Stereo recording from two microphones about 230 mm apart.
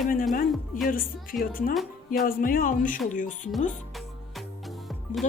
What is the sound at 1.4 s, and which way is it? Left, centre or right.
Speech, left.